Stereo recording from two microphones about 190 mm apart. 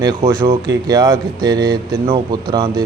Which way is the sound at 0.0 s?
25° right (ahead or behind).